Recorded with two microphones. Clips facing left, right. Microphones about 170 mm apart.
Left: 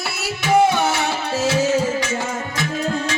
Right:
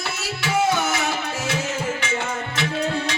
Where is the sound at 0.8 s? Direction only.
30° left (ahead or behind).